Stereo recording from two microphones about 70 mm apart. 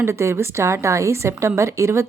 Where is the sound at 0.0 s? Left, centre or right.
Right.